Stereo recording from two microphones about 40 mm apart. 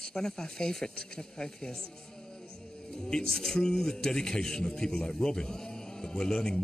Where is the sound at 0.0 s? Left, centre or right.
Centre.